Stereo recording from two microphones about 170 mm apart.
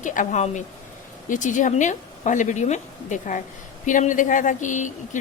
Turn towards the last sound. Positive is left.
turn(degrees=45)  # may be behind; listen again after turning